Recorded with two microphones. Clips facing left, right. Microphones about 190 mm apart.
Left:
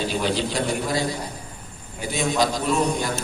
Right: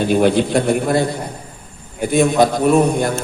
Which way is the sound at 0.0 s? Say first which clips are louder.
Right 10 dB; 55° right (ahead or behind).